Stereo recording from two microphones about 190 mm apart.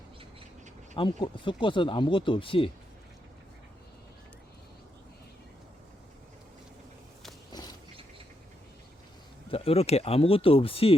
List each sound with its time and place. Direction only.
0.9 s speech: 25° left (ahead or behind)
7.5 s a sound: 20° left (ahead or behind)
9.5 s speech: 30° left (ahead or behind)